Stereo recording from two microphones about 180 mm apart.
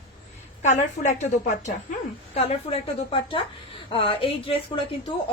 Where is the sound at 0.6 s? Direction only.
40° left (ahead or behind).